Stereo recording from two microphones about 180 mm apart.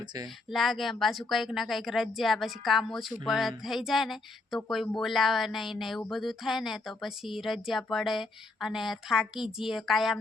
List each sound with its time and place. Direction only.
0.5 s speech: centre (ahead or behind)